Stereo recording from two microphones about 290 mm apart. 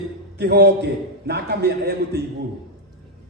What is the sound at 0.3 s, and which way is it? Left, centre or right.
A man's voice, right.